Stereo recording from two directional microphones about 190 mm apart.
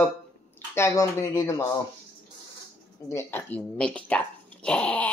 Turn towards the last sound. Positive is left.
turn(degrees=5)  # may be behind; listen again after turning